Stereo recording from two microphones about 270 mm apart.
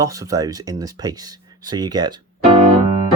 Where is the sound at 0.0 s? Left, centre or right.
Centre.